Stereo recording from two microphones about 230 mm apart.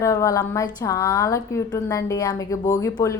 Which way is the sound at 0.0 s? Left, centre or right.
Centre.